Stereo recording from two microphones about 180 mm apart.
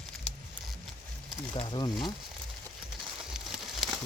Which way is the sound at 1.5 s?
25° left (ahead or behind).